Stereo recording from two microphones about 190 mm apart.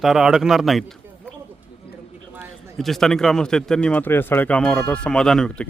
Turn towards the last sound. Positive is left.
turn(degrees=5)  # may be behind; listen again after turning